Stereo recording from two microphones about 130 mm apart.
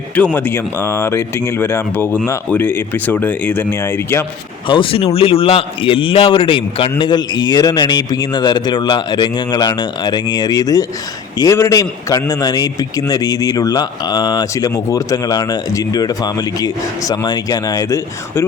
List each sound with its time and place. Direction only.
0.3 s speech: 15° left (ahead or behind)
4.7 s a man's voice: 45° left (ahead or behind); by 18.4 s 25° left (ahead or behind)